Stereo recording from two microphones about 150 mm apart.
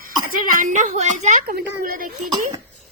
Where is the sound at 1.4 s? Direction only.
80° right.